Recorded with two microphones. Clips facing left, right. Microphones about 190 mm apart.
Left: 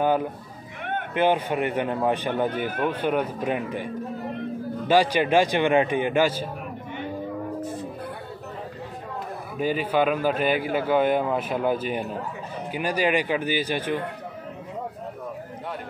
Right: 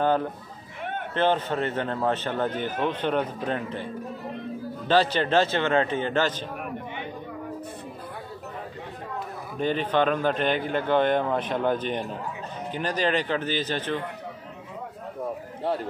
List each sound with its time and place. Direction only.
0.0 s a man's voice: 10° left (ahead or behind)
9.6 s a man's voice: 10° left (ahead or behind)